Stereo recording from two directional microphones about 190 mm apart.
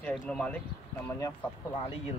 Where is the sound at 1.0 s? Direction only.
15° left (ahead or behind).